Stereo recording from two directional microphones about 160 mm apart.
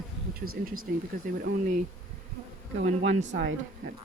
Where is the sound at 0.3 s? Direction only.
65° right (ahead or behind).